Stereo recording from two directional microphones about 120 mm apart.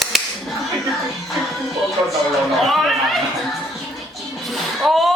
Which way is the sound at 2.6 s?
Centre (ahead or behind).